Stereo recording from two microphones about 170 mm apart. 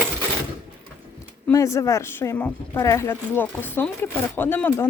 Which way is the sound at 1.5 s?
20° left (ahead or behind).